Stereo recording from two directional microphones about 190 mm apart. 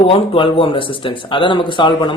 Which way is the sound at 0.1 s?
30° left (ahead or behind).